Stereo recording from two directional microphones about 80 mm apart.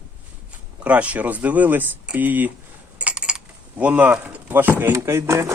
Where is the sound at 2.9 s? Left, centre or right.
Centre.